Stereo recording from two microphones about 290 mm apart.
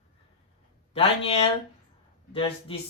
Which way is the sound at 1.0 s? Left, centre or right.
Left.